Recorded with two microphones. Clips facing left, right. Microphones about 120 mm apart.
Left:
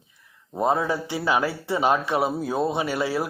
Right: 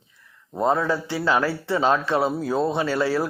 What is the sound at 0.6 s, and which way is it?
Speech, 15° left (ahead or behind).